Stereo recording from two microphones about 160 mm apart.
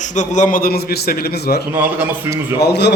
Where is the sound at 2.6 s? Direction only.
90° left.